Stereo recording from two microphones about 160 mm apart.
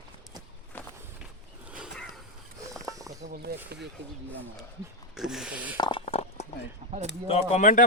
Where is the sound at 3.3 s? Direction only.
80° right.